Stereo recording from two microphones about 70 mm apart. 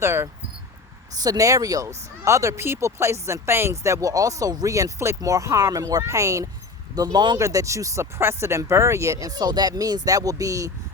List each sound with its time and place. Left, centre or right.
0.0 s speech: right
1.1 s speech: right
2.2 s speech: right
6.0 s speech: right
6.9 s speech: right
7.3 s speech: right
8.2 s speech: right
9.2 s speech: right